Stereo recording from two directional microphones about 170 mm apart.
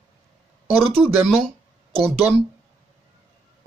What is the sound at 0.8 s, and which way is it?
Speech, 35° right (ahead or behind).